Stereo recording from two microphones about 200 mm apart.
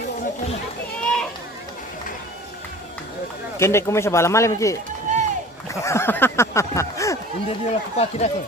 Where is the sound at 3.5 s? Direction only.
15° left (ahead or behind).